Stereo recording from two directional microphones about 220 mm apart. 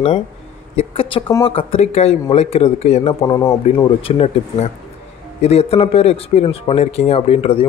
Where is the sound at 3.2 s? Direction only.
15° left (ahead or behind).